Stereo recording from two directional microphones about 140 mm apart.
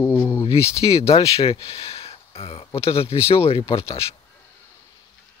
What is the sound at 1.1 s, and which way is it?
Speech, 45° left (ahead or behind).